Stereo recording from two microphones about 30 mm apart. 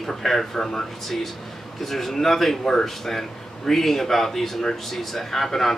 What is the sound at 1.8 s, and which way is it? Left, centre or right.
Speech, centre.